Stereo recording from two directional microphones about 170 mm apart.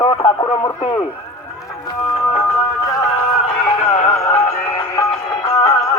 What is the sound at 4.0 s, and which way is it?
Music, 10° left (ahead or behind).